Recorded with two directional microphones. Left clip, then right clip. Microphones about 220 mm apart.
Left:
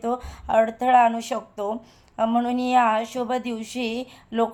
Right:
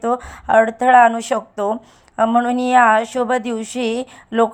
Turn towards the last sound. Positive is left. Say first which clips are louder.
# right 7 dB
turn(degrees=-20)  # may be behind; listen again after turning